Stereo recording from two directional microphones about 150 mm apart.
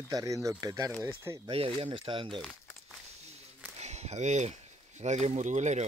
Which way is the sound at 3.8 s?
45° right (ahead or behind).